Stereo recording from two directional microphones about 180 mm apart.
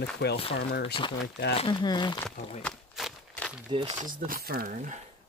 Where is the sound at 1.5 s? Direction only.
25° left (ahead or behind).